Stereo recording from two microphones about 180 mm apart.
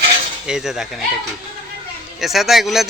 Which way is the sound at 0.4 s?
Centre (ahead or behind).